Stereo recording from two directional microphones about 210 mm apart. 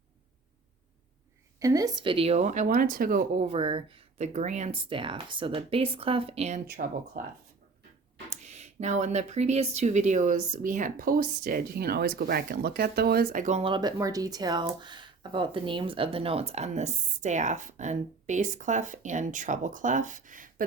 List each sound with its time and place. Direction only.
1.5 s speech: 15° right (ahead or behind); by 3.4 s 45° right (ahead or behind)
3.4 s speech: 25° right (ahead or behind)
6.7 s speech: 45° right (ahead or behind)
8.4 s speech: 35° right (ahead or behind)